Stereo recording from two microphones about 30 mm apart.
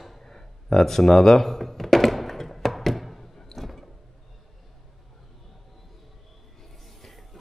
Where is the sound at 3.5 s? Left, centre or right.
Centre.